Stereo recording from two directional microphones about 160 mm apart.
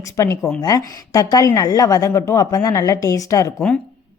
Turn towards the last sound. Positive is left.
turn(degrees=20)  # may be behind; listen again after turning